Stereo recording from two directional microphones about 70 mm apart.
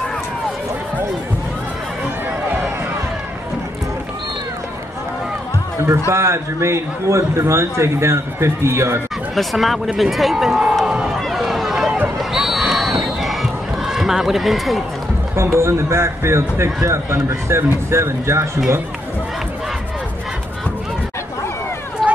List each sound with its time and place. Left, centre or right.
6.1 s a man's voice: right
9.3 s speech: centre
11.1 s run: centre
12.2 s crowd: centre
15.3 s a man's voice: right
22.0 s run: centre